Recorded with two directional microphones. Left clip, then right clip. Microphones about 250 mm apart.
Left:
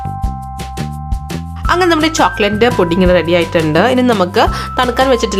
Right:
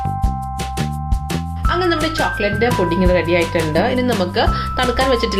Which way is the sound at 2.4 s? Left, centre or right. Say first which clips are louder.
Left 6 dB; left.